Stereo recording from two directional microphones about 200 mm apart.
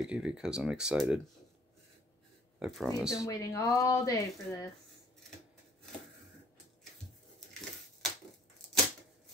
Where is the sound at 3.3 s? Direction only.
15° left (ahead or behind).